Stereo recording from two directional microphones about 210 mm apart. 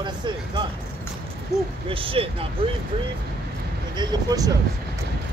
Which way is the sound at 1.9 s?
25° right (ahead or behind).